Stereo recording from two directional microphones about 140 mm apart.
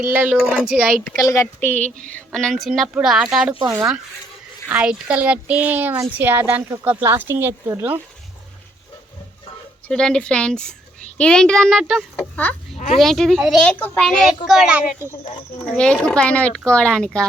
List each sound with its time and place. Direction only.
0.1 s a child's voice: 10° right (ahead or behind)
1.2 s speech: 20° left (ahead or behind)
2.0 s a woman's voice: 5° left (ahead or behind)
4.7 s a child's voice: 5° right (ahead or behind)
9.9 s a woman's voice: 5° left (ahead or behind)
12.1 s a woman's voice: 10° left (ahead or behind); by 15.1 s 10° right (ahead or behind)
15.6 s speech: 5° left (ahead or behind)